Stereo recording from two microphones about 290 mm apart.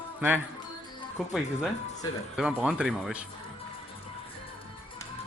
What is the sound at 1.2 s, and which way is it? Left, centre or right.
Speech, centre.